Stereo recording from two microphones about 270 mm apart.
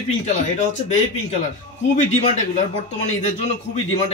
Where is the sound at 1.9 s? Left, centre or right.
Left.